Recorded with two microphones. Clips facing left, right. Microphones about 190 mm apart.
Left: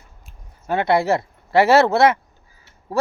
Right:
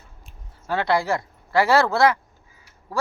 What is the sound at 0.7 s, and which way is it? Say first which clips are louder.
Speech: left 4 dB; 20° left (ahead or behind).